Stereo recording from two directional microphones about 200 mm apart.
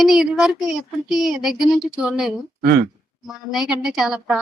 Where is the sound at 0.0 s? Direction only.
Centre (ahead or behind).